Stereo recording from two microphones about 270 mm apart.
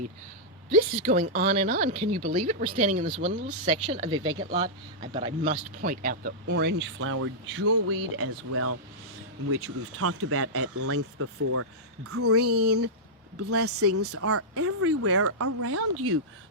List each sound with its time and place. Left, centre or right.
1.0 s speech: right